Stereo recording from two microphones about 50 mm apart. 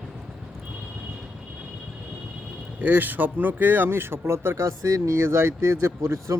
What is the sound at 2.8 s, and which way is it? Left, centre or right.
Speech, right.